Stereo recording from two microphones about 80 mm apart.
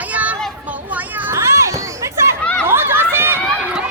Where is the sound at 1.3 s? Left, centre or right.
Right.